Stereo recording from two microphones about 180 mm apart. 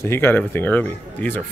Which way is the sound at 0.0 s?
10° left (ahead or behind).